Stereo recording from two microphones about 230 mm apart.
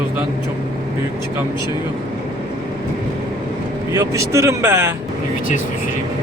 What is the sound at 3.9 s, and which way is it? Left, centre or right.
Speech, centre.